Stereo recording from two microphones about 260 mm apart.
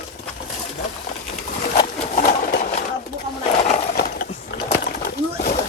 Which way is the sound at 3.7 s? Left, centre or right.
Left.